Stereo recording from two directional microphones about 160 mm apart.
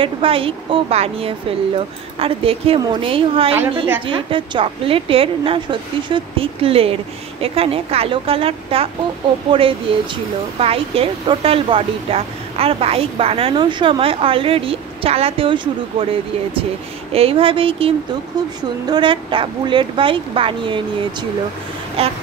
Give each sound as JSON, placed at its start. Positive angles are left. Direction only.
{"t": 0.0, "sound": "a woman's voice", "side_deg": -35}